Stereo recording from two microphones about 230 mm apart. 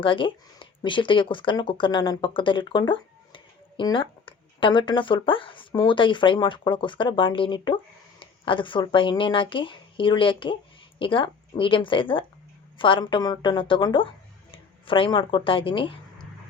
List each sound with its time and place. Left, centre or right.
0.0 s speech: left